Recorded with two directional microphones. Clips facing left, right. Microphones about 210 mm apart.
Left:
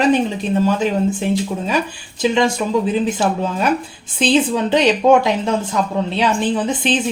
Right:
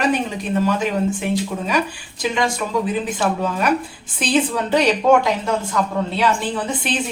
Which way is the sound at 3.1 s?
25° left (ahead or behind).